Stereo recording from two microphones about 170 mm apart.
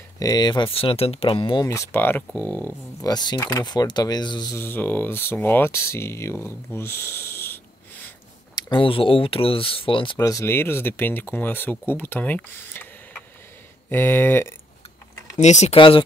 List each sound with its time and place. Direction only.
0.2 s speech: 25° left (ahead or behind)
3.0 s speech: 25° left (ahead or behind)
4.6 s speech: 10° left (ahead or behind)
8.5 s speech: 30° left (ahead or behind)
10.1 s speech: 20° left (ahead or behind)
15.3 s speech: 45° left (ahead or behind)